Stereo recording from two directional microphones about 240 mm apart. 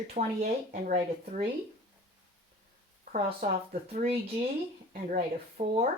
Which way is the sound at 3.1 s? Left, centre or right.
Right.